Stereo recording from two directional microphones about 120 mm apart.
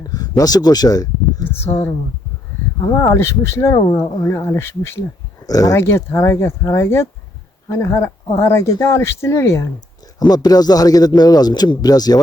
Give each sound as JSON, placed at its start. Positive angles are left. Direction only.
{"t": 0.1, "sound": "a sound", "side_deg": 30}
{"t": 1.7, "sound": "speech", "side_deg": 50}
{"t": 2.8, "sound": "speech", "side_deg": 25}
{"t": 5.5, "sound": "speech", "side_deg": 30}
{"t": 10.2, "sound": "speech", "side_deg": 35}